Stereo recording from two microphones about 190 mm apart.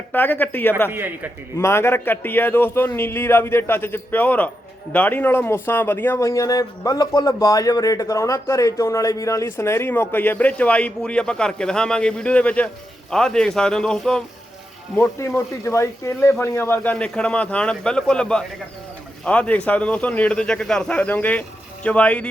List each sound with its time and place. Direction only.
0.1 s a man's voice: 10° left (ahead or behind)
0.9 s a man's voice: 10° right (ahead or behind)
1.5 s a man's voice: 15° left (ahead or behind)
14.9 s a man's voice: 15° left (ahead or behind)